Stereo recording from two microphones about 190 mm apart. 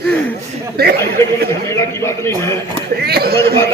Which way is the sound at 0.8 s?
55° right (ahead or behind).